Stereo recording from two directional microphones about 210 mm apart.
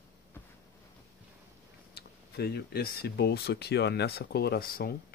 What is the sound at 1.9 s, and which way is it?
Speech, 50° left (ahead or behind).